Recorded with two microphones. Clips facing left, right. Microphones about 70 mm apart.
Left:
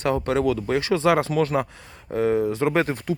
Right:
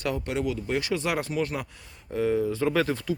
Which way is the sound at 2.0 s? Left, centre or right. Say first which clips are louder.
Left 4 dB; left.